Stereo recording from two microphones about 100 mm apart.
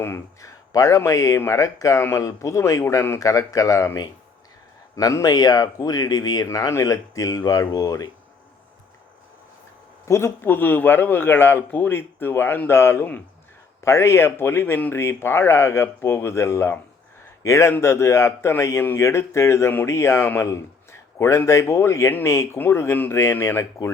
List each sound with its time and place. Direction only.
0.0 s speech: 30° left (ahead or behind)
10.1 s speech: 25° left (ahead or behind)